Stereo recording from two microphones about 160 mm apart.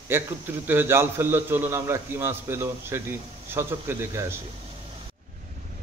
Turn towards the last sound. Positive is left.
turn(degrees=-15)  # may be behind; listen again after turning